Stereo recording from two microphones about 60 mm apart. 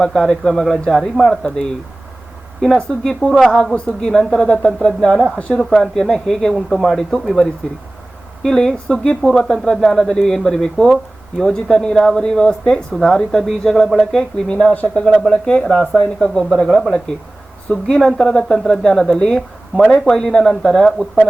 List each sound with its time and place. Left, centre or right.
0.0 s speech: centre
5.5 s speech: centre
8.4 s speech: centre
14.7 s a man's voice: left
15.2 s speech: centre